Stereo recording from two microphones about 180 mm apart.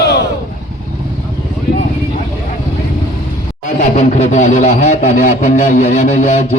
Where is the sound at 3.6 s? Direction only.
40° left (ahead or behind).